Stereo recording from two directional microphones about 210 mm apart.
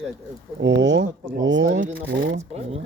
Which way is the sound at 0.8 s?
60° right (ahead or behind).